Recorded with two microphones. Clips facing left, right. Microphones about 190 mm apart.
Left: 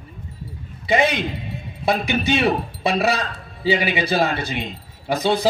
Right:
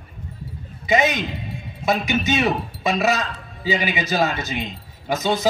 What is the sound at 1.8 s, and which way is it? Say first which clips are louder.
Speech: left 1 dB; 45° right (ahead or behind).